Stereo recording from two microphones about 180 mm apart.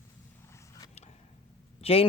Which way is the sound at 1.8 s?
30° left (ahead or behind).